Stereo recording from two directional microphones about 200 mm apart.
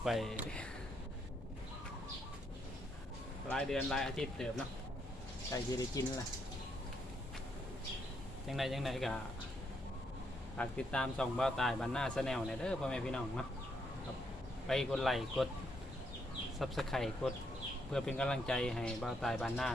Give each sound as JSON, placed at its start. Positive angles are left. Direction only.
{"t": 0.0, "sound": "speech", "side_deg": 0}
{"t": 3.5, "sound": "speech", "side_deg": 5}
{"t": 5.7, "sound": "speech", "side_deg": 15}
{"t": 8.4, "sound": "speech", "side_deg": 0}
{"t": 10.6, "sound": "speech", "side_deg": 5}
{"t": 14.7, "sound": "speech", "side_deg": 0}
{"t": 16.6, "sound": "speech", "side_deg": 0}